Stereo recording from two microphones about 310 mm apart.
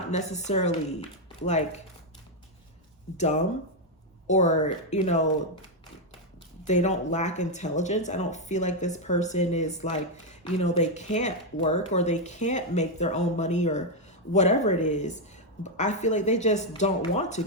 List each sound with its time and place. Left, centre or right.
0.2 s speech: left
3.2 s speech: left
6.7 s speech: left